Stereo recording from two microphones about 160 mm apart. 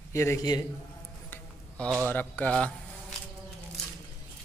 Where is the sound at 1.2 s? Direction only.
10° left (ahead or behind).